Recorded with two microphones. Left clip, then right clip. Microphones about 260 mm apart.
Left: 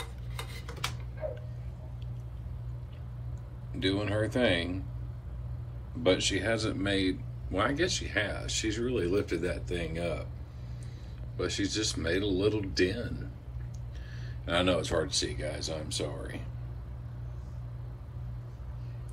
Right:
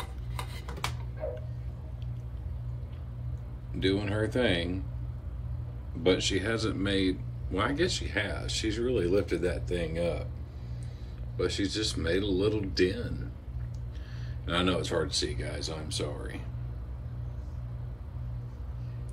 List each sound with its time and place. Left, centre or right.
0.4 s tick-tock: right
3.8 s speech: centre
6.0 s speech: centre
11.3 s speech: centre
14.4 s speech: centre